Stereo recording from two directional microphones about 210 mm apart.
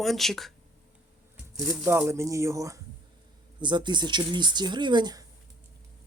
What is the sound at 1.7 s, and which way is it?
Speech, 10° right (ahead or behind).